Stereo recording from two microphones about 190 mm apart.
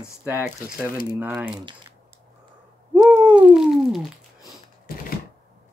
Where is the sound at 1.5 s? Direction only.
25° right (ahead or behind).